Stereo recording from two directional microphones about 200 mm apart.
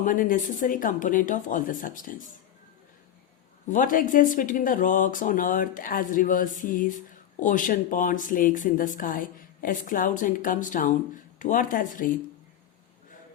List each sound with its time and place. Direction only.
0.0 s speech: 45° left (ahead or behind)
3.7 s a woman's voice: 40° left (ahead or behind)